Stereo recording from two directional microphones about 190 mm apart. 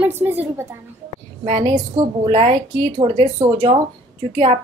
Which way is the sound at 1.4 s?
30° right (ahead or behind).